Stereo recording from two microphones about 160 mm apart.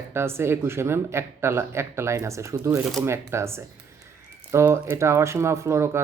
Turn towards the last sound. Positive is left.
turn(degrees=-15)  # may be behind; listen again after turning